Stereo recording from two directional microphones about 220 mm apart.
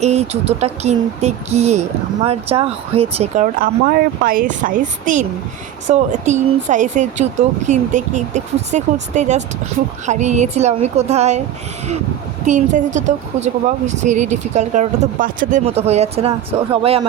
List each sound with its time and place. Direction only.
0.0 s speech: 30° right (ahead or behind)
12.5 s speech: 35° right (ahead or behind)